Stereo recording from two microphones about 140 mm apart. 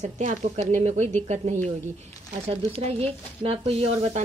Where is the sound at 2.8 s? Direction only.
45° right (ahead or behind).